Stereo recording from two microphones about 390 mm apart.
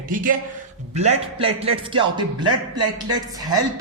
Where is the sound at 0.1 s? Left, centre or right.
Right.